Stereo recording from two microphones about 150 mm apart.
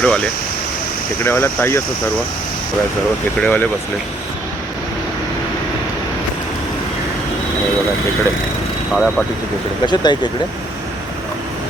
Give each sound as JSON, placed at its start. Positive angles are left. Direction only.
{"t": 0.0, "sound": "speech", "side_deg": 5}
{"t": 3.4, "sound": "speech", "side_deg": 10}
{"t": 8.9, "sound": "speech", "side_deg": 0}
{"t": 9.8, "sound": "speech", "side_deg": 30}